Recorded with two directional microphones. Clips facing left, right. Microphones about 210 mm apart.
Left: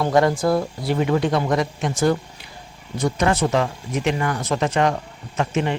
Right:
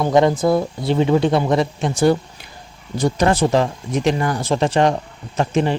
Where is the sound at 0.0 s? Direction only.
20° right (ahead or behind).